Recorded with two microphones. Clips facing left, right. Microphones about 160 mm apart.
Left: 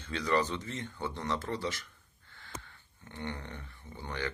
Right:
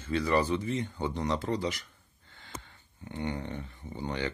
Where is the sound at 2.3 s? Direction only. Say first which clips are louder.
Right 1 dB; 20° right (ahead or behind).